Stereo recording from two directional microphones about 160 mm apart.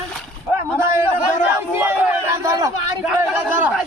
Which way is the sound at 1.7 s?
15° right (ahead or behind).